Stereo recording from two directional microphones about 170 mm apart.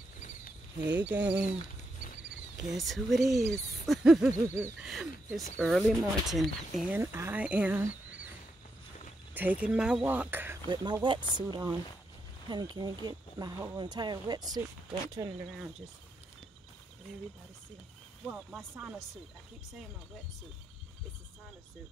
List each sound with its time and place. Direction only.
0.9 s speech: 10° right (ahead or behind)
2.7 s speech: centre (ahead or behind)
4.8 s speech: centre (ahead or behind)
7.0 s speech: 15° right (ahead or behind)
9.3 s speech: 10° right (ahead or behind)
10.7 s speech: 25° right (ahead or behind)
18.5 s speech: 5° right (ahead or behind)